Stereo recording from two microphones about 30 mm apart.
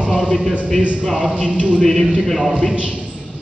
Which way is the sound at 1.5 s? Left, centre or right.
Right.